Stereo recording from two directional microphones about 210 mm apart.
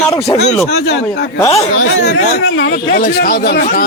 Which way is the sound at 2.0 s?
50° left (ahead or behind).